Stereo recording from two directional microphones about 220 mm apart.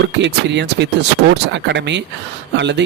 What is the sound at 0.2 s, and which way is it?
Speech, 50° right (ahead or behind).